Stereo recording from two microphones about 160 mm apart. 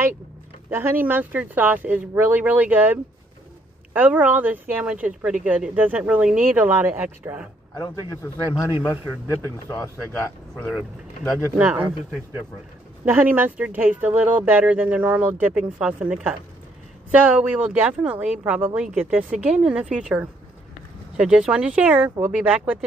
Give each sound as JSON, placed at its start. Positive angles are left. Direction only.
{"t": 0.7, "sound": "speech", "side_deg": -15}
{"t": 9.3, "sound": "speech", "side_deg": 15}
{"t": 10.6, "sound": "speech", "side_deg": 0}
{"t": 13.0, "sound": "speech", "side_deg": -10}